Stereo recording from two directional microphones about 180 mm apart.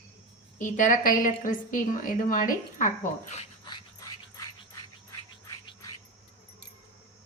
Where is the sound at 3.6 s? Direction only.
20° left (ahead or behind).